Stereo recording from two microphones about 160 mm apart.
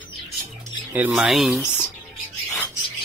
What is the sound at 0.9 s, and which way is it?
Speech, 10° right (ahead or behind).